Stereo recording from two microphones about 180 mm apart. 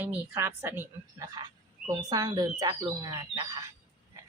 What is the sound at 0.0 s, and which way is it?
A woman's voice, 10° right (ahead or behind).